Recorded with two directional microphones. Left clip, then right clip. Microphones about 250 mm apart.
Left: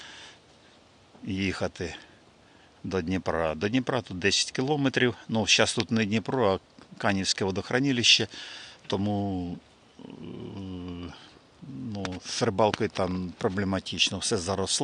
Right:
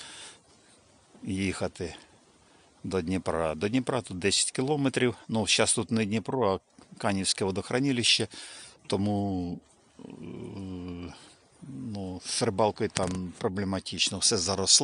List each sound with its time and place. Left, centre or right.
0.0 s a sound: centre
1.2 s speech: centre
10.1 s dog: centre
11.9 s speech: centre